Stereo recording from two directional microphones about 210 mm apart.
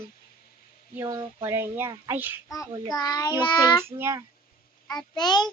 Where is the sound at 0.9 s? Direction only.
10° right (ahead or behind).